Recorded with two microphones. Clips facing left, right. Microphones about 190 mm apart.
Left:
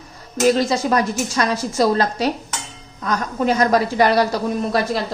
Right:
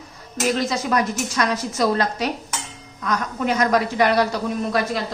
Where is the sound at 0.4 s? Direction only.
35° left (ahead or behind).